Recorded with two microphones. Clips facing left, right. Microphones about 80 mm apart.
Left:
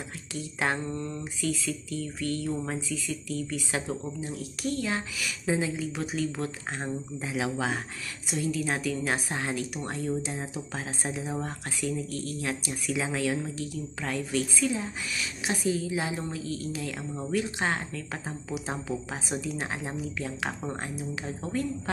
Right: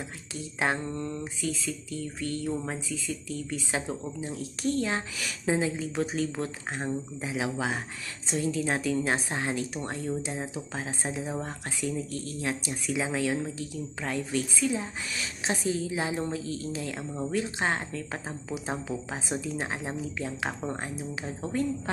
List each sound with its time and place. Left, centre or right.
0.6 s a woman's voice: right